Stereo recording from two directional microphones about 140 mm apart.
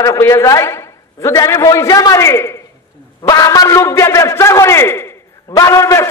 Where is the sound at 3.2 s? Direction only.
25° left (ahead or behind).